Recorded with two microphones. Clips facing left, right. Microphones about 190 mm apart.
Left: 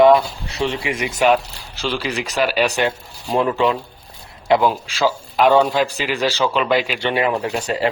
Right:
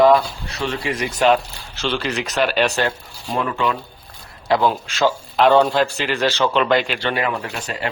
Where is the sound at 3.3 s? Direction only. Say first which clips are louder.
Left 4 dB; 25° left (ahead or behind).